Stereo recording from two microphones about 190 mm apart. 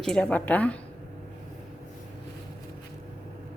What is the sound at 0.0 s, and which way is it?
Speech, 5° left (ahead or behind).